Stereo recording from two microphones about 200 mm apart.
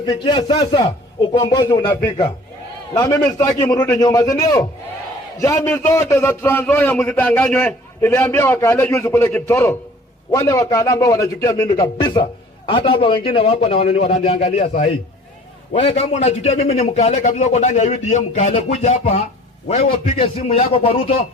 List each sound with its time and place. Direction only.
0.0 s a man's voice: 20° left (ahead or behind)
2.9 s a man's voice: 20° left (ahead or behind)